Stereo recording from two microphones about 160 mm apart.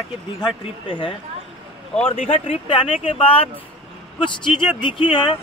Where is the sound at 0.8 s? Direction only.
30° left (ahead or behind).